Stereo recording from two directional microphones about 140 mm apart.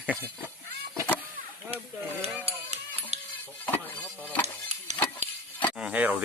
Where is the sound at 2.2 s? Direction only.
45° right (ahead or behind).